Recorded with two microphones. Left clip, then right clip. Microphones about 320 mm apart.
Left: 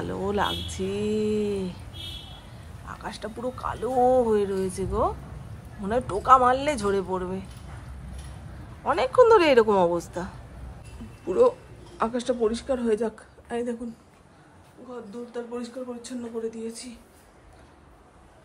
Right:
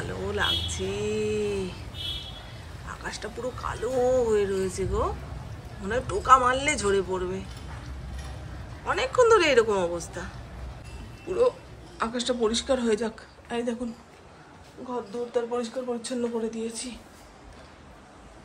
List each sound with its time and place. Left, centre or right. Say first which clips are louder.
0.0 s speech: left 2 dB; centre
2.9 s speech: even; centre
8.8 s a woman's voice: left 3 dB; centre
15.3 s a woman's voice: right 6 dB; centre